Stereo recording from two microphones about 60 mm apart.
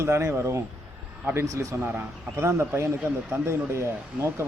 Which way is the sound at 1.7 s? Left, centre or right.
Right.